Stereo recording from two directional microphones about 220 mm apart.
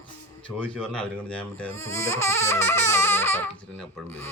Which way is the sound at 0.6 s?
5° left (ahead or behind).